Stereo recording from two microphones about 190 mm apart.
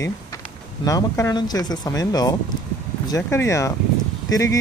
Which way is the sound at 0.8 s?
15° left (ahead or behind).